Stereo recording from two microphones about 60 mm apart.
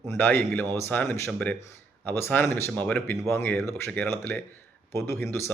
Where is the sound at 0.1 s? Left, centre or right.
Left.